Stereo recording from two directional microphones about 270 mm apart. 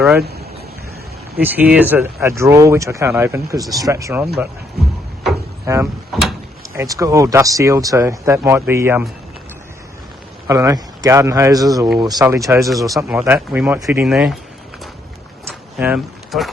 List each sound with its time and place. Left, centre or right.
0.2 s speech: right
1.4 s speech: centre
5.6 s speech: centre
10.4 s speech: centre
12.6 s speech: centre
15.8 s speech: centre